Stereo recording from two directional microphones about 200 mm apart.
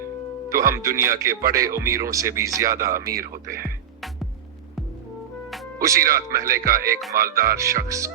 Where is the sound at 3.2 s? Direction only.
45° right (ahead or behind).